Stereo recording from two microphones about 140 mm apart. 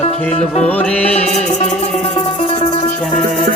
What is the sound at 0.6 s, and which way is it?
Music, 10° left (ahead or behind).